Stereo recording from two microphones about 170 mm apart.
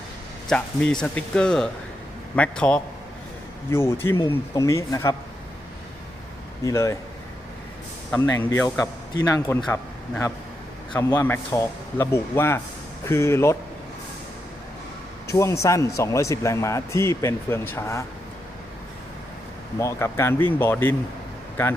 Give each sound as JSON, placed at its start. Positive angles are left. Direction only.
{"t": 0.5, "sound": "a man's voice", "side_deg": 5}
{"t": 6.7, "sound": "speech", "side_deg": 20}
{"t": 8.1, "sound": "a man's voice", "side_deg": 15}
{"t": 15.3, "sound": "a man's voice", "side_deg": 15}
{"t": 19.8, "sound": "a man's voice", "side_deg": 15}